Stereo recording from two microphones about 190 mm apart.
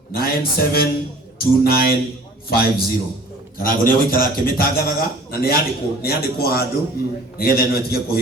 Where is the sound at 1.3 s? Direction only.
55° left (ahead or behind).